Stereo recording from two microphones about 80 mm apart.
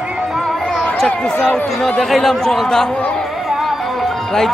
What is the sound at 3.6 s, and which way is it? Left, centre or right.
Music, centre.